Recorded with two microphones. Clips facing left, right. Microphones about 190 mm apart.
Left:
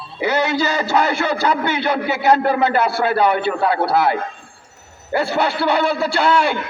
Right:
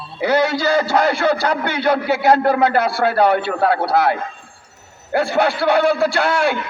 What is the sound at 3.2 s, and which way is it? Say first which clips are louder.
Speech: right 1 dB; 60° right (ahead or behind).